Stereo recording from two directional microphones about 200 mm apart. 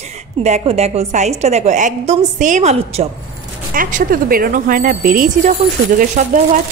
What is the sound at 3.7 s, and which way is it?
Speech, 45° right (ahead or behind).